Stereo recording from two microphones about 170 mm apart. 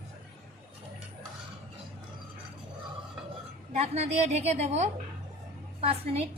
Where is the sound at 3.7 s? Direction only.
40° right (ahead or behind).